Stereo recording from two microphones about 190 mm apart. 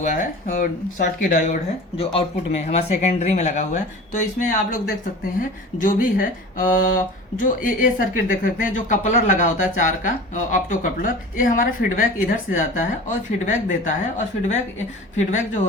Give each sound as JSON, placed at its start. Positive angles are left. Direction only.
{"t": 0.0, "sound": "speech", "side_deg": 45}
{"t": 2.0, "sound": "speech", "side_deg": 30}
{"t": 15.3, "sound": "speech", "side_deg": 40}